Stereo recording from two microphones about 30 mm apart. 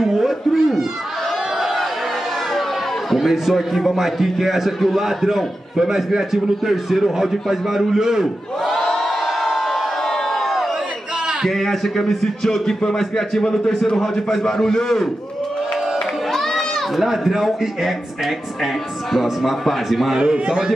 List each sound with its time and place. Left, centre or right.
0.0 s speech: centre
3.3 s a man's voice: centre
8.6 s crowd: centre
11.4 s a man's voice: centre
14.4 s a man's voice: centre
16.3 s a sound: centre
17.0 s a man's voice: centre
19.9 s speech: centre
20.2 s a man's voice: right